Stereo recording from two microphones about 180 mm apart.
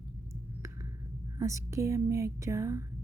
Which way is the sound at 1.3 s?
15° right (ahead or behind).